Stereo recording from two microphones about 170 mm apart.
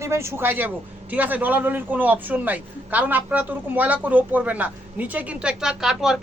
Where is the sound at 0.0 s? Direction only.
15° right (ahead or behind).